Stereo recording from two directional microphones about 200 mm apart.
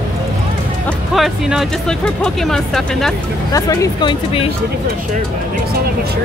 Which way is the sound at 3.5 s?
15° left (ahead or behind).